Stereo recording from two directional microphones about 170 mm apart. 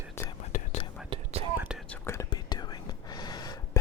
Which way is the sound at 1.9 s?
15° left (ahead or behind).